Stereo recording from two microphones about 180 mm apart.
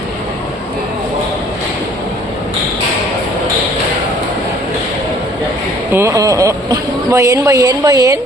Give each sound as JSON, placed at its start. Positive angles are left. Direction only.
{"t": 5.9, "sound": "a woman's voice", "side_deg": -15}